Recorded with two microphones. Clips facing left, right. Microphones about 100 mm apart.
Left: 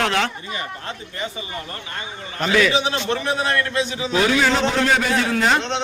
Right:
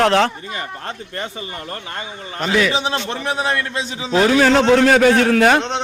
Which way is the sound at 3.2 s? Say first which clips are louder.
Right 1 dB; 20° right (ahead or behind).